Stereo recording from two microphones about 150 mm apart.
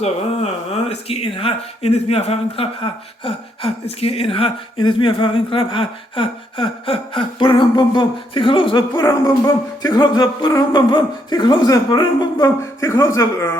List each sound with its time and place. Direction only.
0.0 s speech: 45° left (ahead or behind); by 13.5 s 20° left (ahead or behind)